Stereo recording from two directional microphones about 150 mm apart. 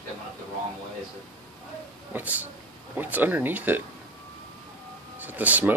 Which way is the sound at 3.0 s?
10° right (ahead or behind).